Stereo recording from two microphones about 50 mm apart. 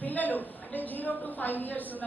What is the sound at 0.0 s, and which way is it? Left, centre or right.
A woman's voice, left.